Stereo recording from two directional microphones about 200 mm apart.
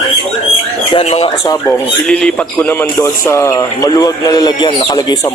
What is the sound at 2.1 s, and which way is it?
A man's voice, 5° left (ahead or behind).